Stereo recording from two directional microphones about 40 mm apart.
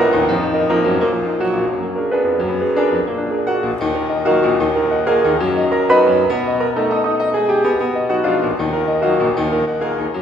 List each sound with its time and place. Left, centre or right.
0.0 s music: centre
5.9 s music: centre